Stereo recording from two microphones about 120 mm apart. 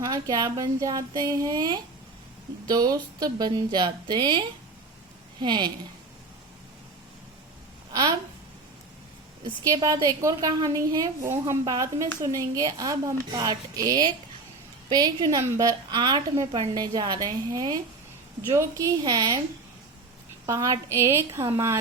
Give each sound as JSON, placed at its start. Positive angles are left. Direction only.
{"t": 0.0, "sound": "a woman's voice", "side_deg": -35}
{"t": 9.4, "sound": "a woman's voice", "side_deg": -30}
{"t": 20.5, "sound": "a woman's voice", "side_deg": -25}